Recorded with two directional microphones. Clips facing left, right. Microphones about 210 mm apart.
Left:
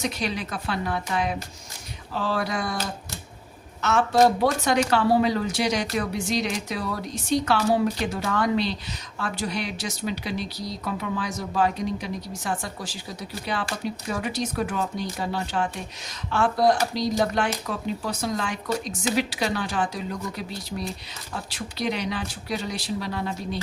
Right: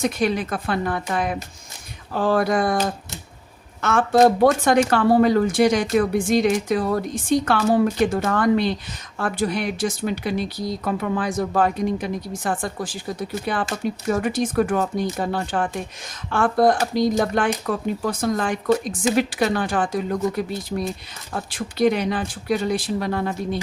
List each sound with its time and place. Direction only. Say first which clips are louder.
0.0 s speech: right 7 dB; 50° right (ahead or behind)